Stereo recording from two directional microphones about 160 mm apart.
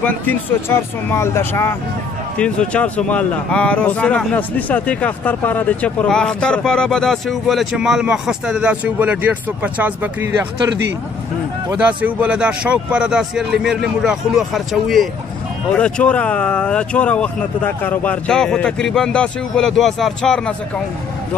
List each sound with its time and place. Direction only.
0.0 s speech: 15° left (ahead or behind); by 10.4 s 10° right (ahead or behind)
11.7 s speech: 10° right (ahead or behind)